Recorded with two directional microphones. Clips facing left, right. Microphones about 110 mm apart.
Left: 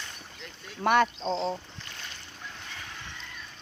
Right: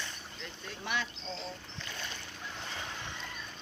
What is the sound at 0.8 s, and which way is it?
Speech, 55° left (ahead or behind).